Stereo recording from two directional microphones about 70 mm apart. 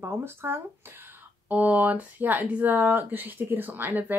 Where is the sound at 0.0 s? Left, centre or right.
Right.